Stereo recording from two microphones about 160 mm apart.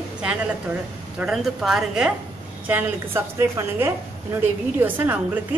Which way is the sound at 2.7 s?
15° right (ahead or behind).